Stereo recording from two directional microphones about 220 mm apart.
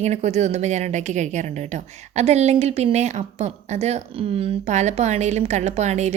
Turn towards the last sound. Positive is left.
turn(degrees=-30)  # may be behind; listen again after turning